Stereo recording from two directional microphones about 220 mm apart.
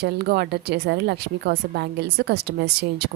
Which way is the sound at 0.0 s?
45° right (ahead or behind).